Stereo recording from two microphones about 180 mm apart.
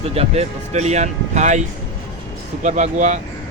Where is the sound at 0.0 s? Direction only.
35° right (ahead or behind).